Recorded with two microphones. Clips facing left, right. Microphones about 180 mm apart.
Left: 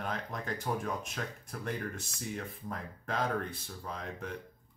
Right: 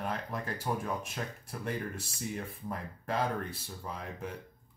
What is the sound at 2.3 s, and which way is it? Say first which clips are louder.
Speech: even; 10° right (ahead or behind).